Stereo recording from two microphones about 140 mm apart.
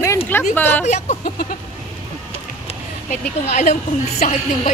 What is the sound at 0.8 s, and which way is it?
Speech, 55° left (ahead or behind).